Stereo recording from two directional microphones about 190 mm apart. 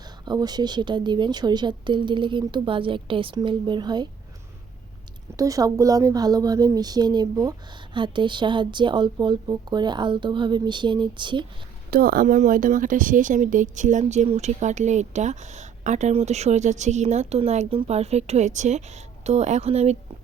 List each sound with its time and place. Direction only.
0.3 s speech: 20° right (ahead or behind)
5.4 s speech: 20° right (ahead or behind)
11.9 s speech: 50° right (ahead or behind); by 20.0 s 35° right (ahead or behind)